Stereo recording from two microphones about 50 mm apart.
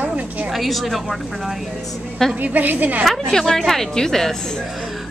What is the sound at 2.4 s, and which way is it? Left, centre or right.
Speech, right.